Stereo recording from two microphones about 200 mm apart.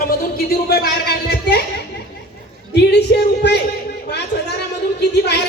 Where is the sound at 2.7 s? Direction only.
55° left (ahead or behind).